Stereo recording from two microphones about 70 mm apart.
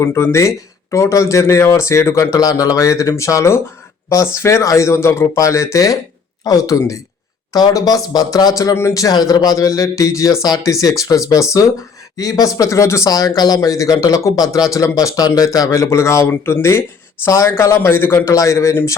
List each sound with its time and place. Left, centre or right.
0.0 s speech: left
2.3 s a man's voice: left
8.7 s a man's voice: left
13.1 s a man's voice: left
18.3 s speech: left